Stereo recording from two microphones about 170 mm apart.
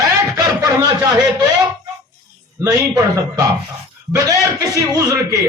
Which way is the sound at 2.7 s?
20° right (ahead or behind).